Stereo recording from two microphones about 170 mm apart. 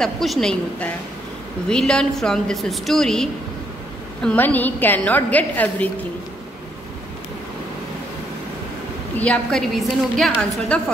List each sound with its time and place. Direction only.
0.0 s a woman's voice: centre (ahead or behind)
9.1 s a woman's voice: 5° left (ahead or behind)